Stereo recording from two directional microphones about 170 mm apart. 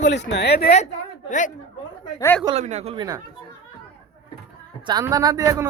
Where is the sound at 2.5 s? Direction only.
40° right (ahead or behind).